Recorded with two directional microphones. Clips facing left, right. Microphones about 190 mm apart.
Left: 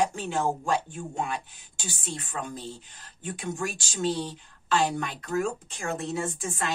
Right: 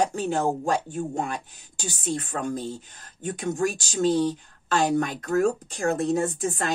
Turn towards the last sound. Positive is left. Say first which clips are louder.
# right 5 dB
turn(degrees=-40)  # may be behind; listen again after turning